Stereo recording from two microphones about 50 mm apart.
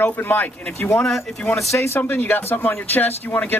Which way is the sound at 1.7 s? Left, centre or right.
Left.